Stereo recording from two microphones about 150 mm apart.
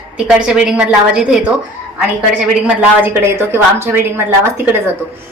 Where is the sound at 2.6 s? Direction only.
15° right (ahead or behind).